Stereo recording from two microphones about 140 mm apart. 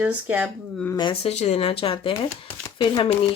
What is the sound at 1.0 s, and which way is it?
Speech, 35° left (ahead or behind).